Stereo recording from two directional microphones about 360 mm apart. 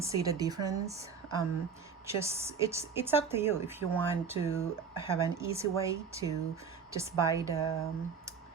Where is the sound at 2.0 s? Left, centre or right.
Centre.